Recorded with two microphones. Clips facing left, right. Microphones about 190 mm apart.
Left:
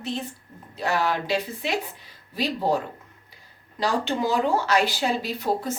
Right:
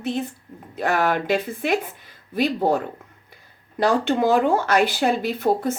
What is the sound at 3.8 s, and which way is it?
Speech, 55° right (ahead or behind).